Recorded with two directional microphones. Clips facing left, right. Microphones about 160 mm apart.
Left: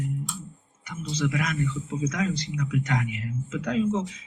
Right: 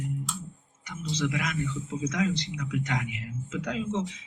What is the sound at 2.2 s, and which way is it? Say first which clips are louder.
Speech: even; centre (ahead or behind).